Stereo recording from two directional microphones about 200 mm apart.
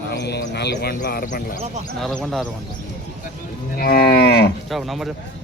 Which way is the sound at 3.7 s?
50° left (ahead or behind).